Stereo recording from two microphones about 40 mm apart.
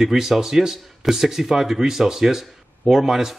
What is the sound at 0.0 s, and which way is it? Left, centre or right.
A man's voice, centre.